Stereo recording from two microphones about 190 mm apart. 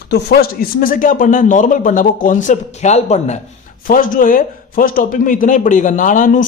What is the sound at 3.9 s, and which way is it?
Speech, 45° left (ahead or behind).